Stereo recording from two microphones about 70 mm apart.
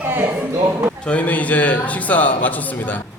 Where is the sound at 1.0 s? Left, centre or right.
Left.